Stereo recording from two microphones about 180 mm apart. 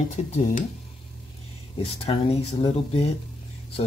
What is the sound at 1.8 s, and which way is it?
Speech, 30° left (ahead or behind).